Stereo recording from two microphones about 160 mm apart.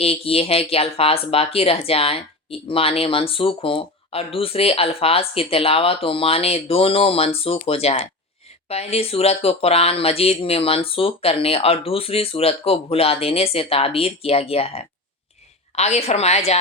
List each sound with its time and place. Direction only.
0.0 s a woman's voice: 40° left (ahead or behind)